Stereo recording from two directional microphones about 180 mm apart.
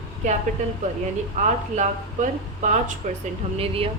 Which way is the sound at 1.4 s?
45° right (ahead or behind).